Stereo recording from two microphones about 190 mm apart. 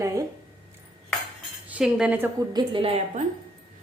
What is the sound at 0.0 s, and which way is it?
Cutlery, 15° right (ahead or behind).